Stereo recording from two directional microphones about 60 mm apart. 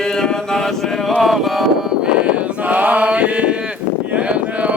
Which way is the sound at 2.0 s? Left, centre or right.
Right.